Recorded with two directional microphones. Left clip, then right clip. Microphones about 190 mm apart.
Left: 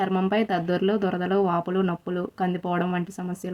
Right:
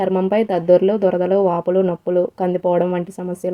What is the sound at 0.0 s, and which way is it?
Speech, centre (ahead or behind).